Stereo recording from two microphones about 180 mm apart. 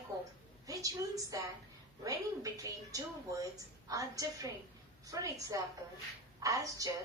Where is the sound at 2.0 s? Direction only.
20° right (ahead or behind).